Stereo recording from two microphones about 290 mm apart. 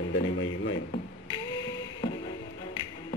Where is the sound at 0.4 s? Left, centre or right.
Left.